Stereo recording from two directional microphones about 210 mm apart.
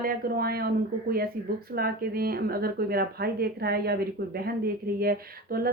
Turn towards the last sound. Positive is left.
turn(degrees=-45)  # may be behind; listen again after turning